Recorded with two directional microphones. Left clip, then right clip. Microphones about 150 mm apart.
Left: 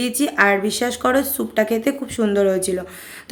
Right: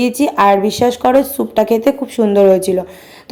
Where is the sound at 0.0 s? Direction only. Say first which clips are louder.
Right 6 dB; 30° right (ahead or behind).